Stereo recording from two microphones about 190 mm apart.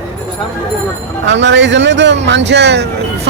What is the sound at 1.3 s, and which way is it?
A man's voice, 70° right (ahead or behind).